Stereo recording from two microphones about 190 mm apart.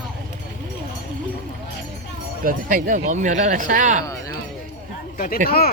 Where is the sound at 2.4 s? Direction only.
45° right (ahead or behind).